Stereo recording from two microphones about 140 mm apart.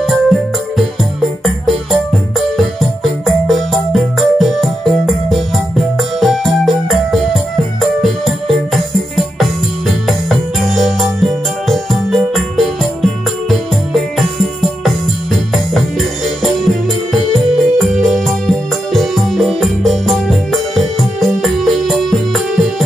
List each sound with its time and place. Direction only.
0.0 s music: centre (ahead or behind)